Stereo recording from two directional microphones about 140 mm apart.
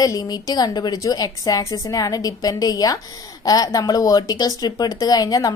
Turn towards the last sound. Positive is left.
turn(degrees=30)  # may be behind; listen again after turning